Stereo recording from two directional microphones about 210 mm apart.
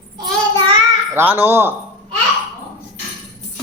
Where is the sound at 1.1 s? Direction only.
10° right (ahead or behind).